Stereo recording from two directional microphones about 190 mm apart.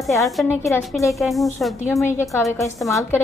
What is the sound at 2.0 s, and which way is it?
Speech, 15° left (ahead or behind).